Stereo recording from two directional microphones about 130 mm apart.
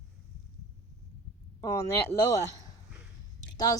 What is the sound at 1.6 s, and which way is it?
Speech, 25° left (ahead or behind).